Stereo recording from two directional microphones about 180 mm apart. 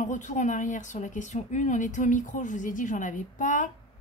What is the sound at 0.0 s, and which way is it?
Speech, 40° left (ahead or behind).